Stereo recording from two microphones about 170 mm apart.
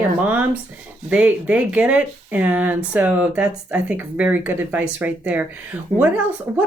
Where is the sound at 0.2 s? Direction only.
10° right (ahead or behind).